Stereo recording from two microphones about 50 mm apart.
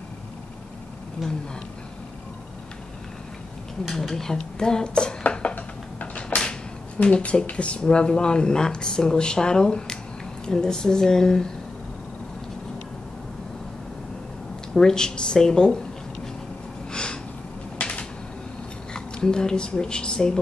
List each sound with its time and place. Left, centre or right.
1.2 s speech: centre
3.9 s speech: centre
5.3 s a sound: left
7.0 s speech: left
14.7 s speech: centre
16.9 s a sound: centre
18.9 s speech: centre